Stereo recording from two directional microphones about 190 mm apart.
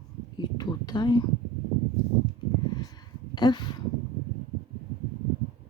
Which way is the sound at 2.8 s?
20° left (ahead or behind).